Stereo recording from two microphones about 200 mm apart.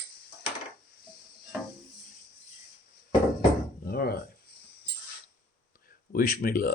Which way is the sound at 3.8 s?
50° left (ahead or behind).